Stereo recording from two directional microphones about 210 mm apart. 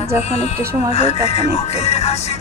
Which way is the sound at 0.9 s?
30° left (ahead or behind).